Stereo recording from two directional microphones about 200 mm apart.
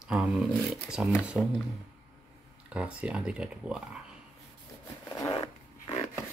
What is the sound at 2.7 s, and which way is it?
Speech, 5° right (ahead or behind).